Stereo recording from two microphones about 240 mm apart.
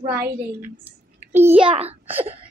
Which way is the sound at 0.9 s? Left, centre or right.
Centre.